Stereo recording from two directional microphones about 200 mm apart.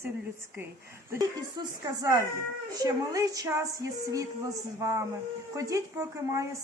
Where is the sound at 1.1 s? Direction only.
20° right (ahead or behind).